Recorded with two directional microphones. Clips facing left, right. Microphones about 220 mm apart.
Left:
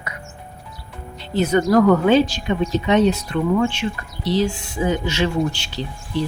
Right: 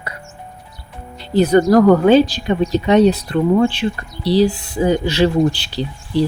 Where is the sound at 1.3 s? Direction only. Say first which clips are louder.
Right 5 dB; 35° right (ahead or behind).